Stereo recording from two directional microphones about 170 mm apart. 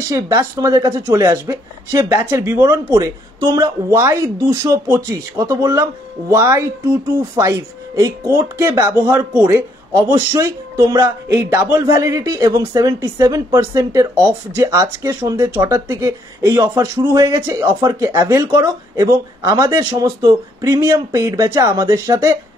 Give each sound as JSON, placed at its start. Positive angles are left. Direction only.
{"t": 0.0, "sound": "speech", "side_deg": -20}